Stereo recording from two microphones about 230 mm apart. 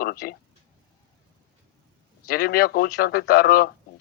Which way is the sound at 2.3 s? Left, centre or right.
Left.